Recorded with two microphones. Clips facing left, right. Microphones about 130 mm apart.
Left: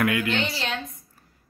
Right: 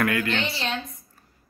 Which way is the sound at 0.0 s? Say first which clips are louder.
Left 1 dB; 10° left (ahead or behind).